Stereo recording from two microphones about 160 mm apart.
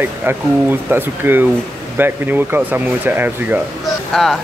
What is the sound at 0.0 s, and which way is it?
Speech, 10° right (ahead or behind).